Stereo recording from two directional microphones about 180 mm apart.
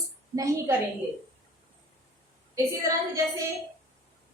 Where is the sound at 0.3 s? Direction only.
15° right (ahead or behind).